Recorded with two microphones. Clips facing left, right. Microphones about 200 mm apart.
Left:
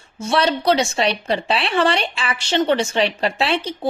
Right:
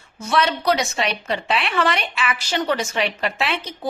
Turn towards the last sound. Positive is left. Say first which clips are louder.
# left 4 dB
turn(degrees=30)  # may be behind; listen again after turning